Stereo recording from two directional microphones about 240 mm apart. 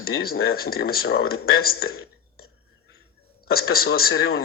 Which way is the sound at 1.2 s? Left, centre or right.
Left.